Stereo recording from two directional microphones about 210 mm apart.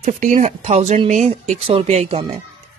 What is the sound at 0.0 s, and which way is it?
A woman's voice, 35° right (ahead or behind).